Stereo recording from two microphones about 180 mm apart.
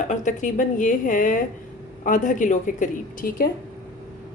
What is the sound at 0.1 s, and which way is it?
Speech, 45° left (ahead or behind).